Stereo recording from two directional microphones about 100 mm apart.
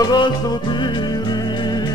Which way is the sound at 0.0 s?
45° left (ahead or behind).